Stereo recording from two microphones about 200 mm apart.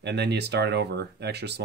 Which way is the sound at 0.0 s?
55° right (ahead or behind).